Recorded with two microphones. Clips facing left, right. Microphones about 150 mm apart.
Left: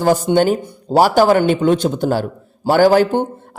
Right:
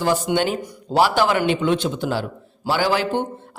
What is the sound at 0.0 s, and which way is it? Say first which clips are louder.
A man's voice: left 6 dB; 45° left (ahead or behind).